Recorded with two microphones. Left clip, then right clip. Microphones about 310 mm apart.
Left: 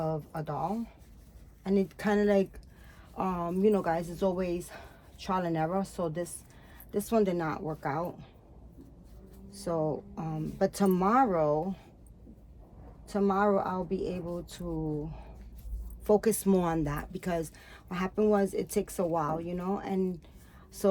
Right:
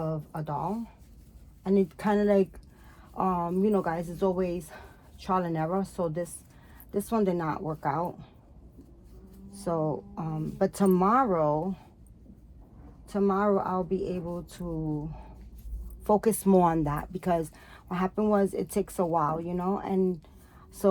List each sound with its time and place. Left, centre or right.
0.0 s a woman's voice: centre
9.5 s a woman's voice: centre
13.1 s a woman's voice: centre
16.0 s a woman's voice: centre